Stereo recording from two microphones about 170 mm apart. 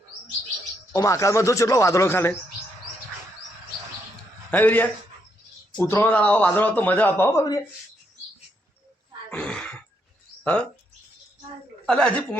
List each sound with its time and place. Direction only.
0.9 s a man's voice: 20° left (ahead or behind)
4.5 s a man's voice: 10° left (ahead or behind)
9.3 s a sound: 5° left (ahead or behind)
10.4 s speech: 10° left (ahead or behind)
11.9 s a woman's voice: 5° left (ahead or behind)